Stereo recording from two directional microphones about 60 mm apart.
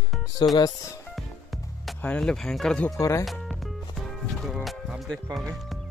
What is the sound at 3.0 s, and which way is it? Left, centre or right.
Speech, left.